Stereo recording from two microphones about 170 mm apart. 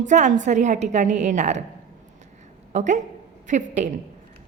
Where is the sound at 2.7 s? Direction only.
45° right (ahead or behind).